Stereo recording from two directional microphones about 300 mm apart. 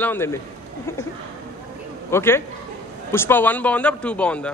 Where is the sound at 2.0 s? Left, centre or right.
Centre.